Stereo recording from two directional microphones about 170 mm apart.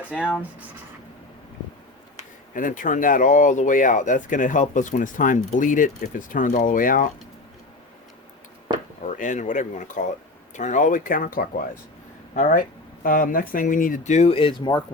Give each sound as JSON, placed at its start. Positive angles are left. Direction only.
{"t": 0.1, "sound": "speech", "side_deg": 10}
{"t": 2.6, "sound": "speech", "side_deg": 50}
{"t": 9.0, "sound": "speech", "side_deg": 50}